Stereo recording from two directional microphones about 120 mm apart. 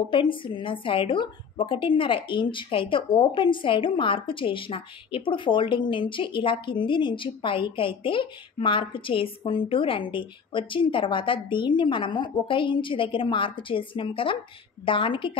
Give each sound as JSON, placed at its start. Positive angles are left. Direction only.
{"t": 0.1, "sound": "a woman's voice", "side_deg": 45}